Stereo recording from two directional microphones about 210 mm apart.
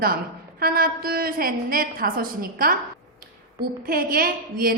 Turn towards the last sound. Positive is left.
turn(degrees=-45)  # may be behind; listen again after turning